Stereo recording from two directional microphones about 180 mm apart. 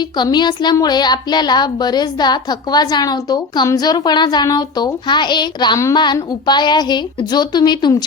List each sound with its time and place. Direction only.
0.2 s a woman's voice: 25° left (ahead or behind)